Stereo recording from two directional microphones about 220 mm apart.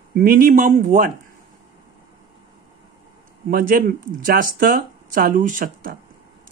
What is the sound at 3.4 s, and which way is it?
Speech, 40° right (ahead or behind).